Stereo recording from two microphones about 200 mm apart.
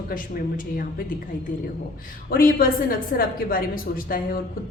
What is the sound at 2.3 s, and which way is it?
A woman's voice, 45° left (ahead or behind).